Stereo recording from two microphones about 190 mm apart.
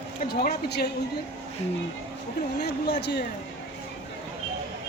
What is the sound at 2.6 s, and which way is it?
Speech, 60° left (ahead or behind).